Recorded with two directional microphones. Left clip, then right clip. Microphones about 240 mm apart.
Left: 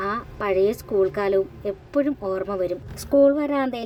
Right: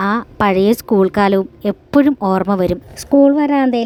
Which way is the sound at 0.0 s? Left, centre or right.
Right.